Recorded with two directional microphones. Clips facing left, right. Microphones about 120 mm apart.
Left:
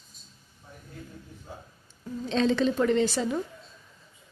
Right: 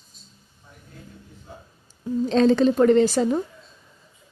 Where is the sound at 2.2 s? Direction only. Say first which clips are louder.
Right 7 dB; 40° right (ahead or behind).